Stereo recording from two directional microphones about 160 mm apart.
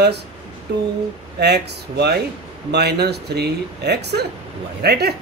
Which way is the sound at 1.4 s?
90° right.